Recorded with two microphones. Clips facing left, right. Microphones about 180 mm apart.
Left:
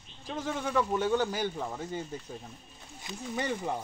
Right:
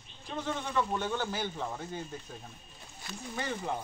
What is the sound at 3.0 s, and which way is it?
Speech, 15° left (ahead or behind).